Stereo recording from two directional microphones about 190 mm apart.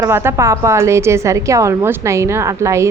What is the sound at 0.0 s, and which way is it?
A woman's voice, 15° right (ahead or behind).